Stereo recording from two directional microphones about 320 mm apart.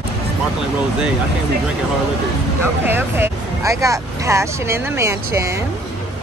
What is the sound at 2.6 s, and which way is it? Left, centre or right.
Speech, centre.